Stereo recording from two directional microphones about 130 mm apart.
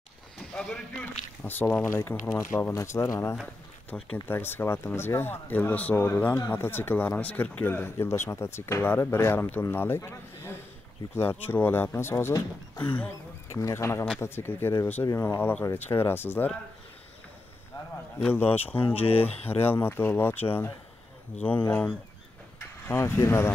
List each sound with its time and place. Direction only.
0.4 s speech: 5° left (ahead or behind); by 3.3 s 20° left (ahead or behind)
3.9 s speech: 10° left (ahead or behind)
18.3 s speech: 15° left (ahead or behind)
18.9 s speech: 50° left (ahead or behind)
19.7 s speech: 15° left (ahead or behind)